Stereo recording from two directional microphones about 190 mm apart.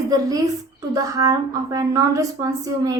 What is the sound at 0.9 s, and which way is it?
A woman's voice, 20° right (ahead or behind).